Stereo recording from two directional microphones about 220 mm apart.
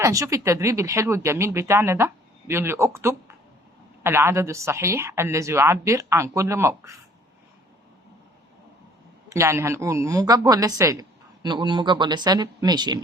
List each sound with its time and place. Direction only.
0.0 s speech: 15° right (ahead or behind)
9.3 s speech: 10° right (ahead or behind)